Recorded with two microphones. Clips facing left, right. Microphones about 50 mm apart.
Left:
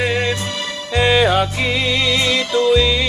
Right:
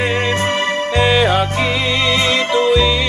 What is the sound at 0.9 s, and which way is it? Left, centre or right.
Music, centre.